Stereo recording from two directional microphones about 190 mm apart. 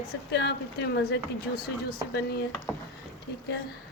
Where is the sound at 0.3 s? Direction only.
60° left (ahead or behind).